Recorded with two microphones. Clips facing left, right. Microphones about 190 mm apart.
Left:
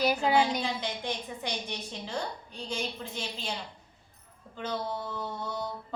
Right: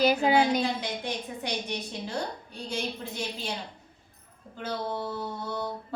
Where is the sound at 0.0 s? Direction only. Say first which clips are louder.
Right 3 dB; 20° right (ahead or behind).